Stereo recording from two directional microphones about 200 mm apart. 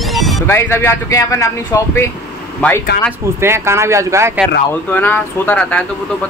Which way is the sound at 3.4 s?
15° right (ahead or behind).